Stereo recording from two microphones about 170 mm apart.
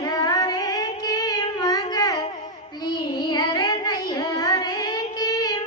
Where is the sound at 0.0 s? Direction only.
20° left (ahead or behind).